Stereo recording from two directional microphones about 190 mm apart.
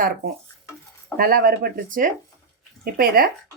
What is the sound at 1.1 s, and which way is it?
Speech, 50° right (ahead or behind).